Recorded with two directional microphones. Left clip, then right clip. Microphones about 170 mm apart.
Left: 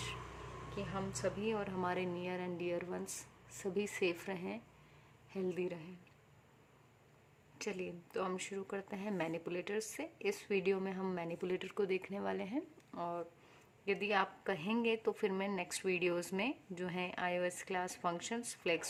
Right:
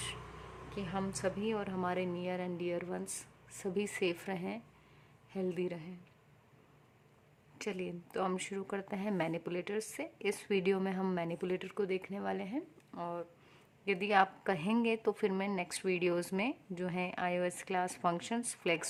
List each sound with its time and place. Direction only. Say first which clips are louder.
0.9 s a woman's voice: right 3 dB; 30° right (ahead or behind)
7.6 s a woman's voice: right 2 dB; 25° right (ahead or behind)
13.8 s a woman's voice: right 5 dB; 30° right (ahead or behind)